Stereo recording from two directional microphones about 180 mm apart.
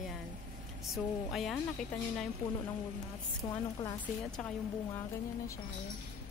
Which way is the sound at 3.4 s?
20° left (ahead or behind).